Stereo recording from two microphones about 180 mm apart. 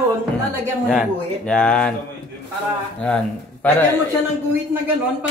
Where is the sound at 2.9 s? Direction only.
5° left (ahead or behind).